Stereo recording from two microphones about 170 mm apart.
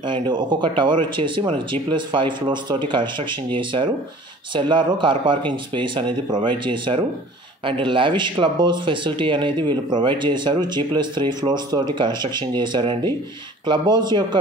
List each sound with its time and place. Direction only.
0.0 s speech: 25° right (ahead or behind)